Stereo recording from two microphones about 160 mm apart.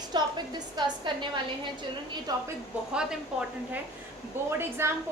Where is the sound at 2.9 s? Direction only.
5° right (ahead or behind).